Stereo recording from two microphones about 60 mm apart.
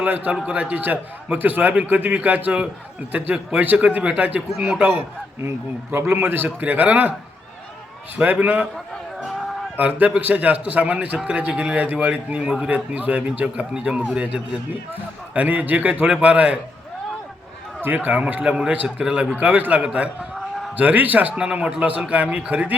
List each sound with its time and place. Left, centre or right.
0.0 s a man's voice: right
5.4 s a man's voice: right
8.1 s a man's voice: right
9.7 s a man's voice: right
12.5 s a man's voice: centre
12.7 s a man's voice: right
15.4 s a man's voice: right
17.8 s a man's voice: right
18.4 s a man's voice: centre
19.4 s a man's voice: right
19.8 s a man's voice: centre
20.7 s a man's voice: right